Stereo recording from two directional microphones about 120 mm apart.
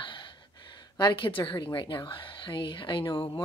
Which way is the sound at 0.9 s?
40° left (ahead or behind).